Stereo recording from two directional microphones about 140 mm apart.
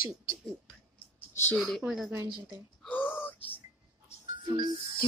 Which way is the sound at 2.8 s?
10° left (ahead or behind).